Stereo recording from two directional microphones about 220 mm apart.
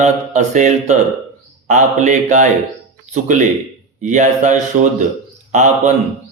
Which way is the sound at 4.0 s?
35° right (ahead or behind).